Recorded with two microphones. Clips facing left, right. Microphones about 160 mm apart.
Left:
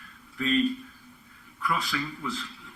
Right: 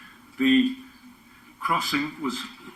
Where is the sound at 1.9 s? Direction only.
20° right (ahead or behind).